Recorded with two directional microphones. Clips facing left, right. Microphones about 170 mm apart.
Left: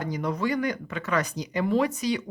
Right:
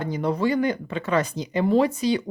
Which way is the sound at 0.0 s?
30° right (ahead or behind).